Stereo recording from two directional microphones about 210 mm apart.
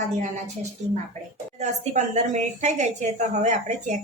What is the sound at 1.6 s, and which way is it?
A woman's voice, 35° right (ahead or behind).